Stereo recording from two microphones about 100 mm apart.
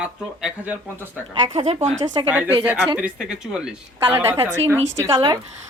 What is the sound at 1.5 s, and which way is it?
Speech, 90° right.